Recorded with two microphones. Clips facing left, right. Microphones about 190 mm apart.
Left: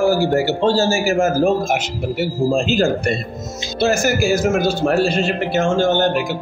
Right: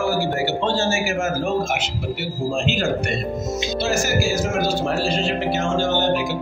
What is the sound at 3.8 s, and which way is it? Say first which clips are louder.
Speech: left 6 dB; 50° left (ahead or behind).